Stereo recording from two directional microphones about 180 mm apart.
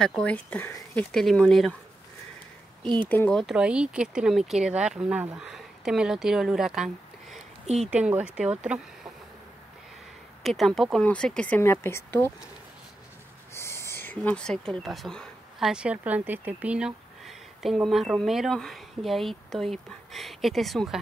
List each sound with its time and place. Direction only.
0.0 s speech: 5° left (ahead or behind)
3.1 s speech: 10° left (ahead or behind)
7.6 s speech: 35° right (ahead or behind)
7.9 s speech: 5° right (ahead or behind)
10.4 s speech: centre (ahead or behind)
13.6 s a sound: 15° left (ahead or behind)
14.7 s speech: centre (ahead or behind)